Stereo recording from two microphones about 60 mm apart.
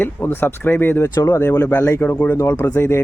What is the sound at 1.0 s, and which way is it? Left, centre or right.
Speech, left.